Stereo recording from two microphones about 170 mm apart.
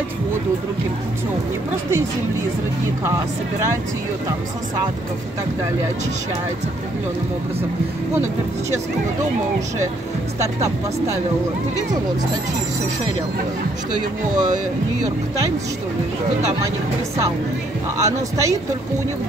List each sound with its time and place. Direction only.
14.3 s speech: 45° right (ahead or behind)
18.0 s speech: 20° right (ahead or behind)